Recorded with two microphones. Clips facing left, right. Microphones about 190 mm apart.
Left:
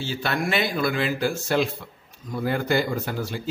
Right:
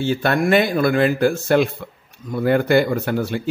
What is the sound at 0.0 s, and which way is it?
Speech, 55° right (ahead or behind).